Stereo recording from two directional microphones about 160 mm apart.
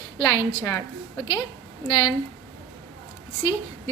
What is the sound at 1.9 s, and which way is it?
Speech, 30° left (ahead or behind).